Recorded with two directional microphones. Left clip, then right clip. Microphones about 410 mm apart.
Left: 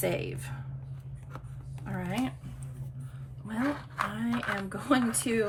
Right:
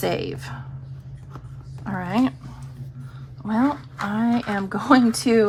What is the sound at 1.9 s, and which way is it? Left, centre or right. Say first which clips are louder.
Speech: right 11 dB; centre.